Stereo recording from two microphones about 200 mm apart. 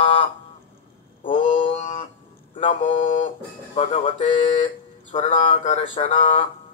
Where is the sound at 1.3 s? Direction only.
30° left (ahead or behind).